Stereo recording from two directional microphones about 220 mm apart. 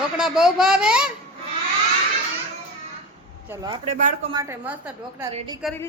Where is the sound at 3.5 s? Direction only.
15° right (ahead or behind).